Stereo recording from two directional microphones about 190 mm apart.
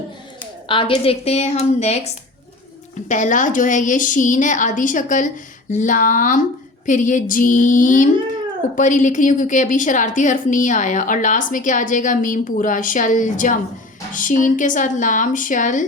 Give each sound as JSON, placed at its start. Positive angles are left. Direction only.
{"t": 0.7, "sound": "a woman's voice", "side_deg": 25}